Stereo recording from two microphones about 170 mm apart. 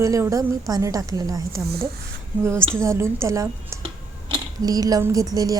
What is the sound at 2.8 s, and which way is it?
A woman's voice, 15° right (ahead or behind).